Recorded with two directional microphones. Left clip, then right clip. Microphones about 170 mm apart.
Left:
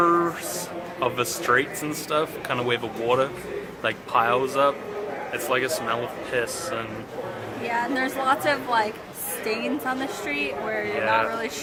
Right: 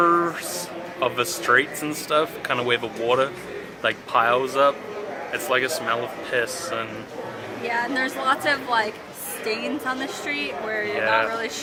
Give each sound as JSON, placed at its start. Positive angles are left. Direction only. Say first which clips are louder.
{"t": 0.0, "sound": "a sound", "louder": "right 1 dB", "side_deg": -10}
{"t": 0.9, "sound": "speech", "louder": "right 2 dB", "side_deg": -10}
{"t": 7.6, "sound": "a woman's voice", "louder": "right 1 dB", "side_deg": 20}
{"t": 11.0, "sound": "speech", "louder": "right 1 dB", "side_deg": -10}